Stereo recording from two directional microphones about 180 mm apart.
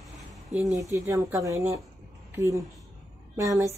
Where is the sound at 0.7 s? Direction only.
15° right (ahead or behind).